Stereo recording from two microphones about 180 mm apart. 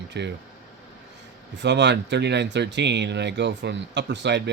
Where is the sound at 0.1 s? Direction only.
70° right (ahead or behind).